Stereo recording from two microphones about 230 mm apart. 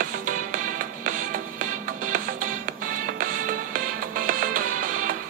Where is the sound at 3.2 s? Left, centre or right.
Right.